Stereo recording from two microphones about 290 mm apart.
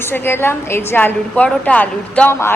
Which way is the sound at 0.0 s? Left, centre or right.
Centre.